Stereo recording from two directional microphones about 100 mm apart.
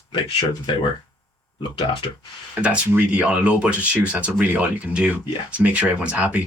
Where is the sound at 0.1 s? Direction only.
60° left (ahead or behind).